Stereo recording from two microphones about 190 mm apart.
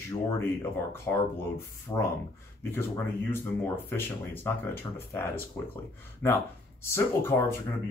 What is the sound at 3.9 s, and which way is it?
Speech, 10° left (ahead or behind).